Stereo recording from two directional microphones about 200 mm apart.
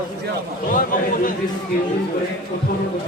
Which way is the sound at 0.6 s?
40° left (ahead or behind).